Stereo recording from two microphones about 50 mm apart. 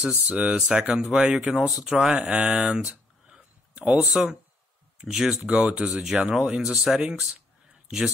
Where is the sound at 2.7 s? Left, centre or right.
Centre.